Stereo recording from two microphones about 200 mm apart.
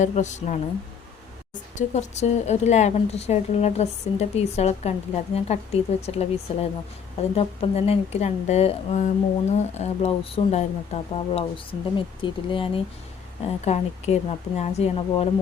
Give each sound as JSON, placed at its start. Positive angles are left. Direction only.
{"t": 0.0, "sound": "a woman's voice", "side_deg": 35}
{"t": 1.7, "sound": "a woman's voice", "side_deg": 35}